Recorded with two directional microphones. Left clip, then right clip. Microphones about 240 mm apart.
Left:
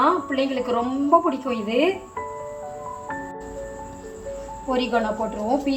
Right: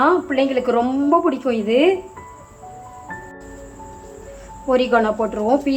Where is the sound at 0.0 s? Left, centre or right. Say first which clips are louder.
Right 4 dB; centre.